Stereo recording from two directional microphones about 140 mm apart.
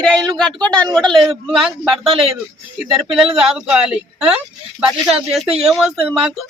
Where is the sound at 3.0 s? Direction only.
Centre (ahead or behind).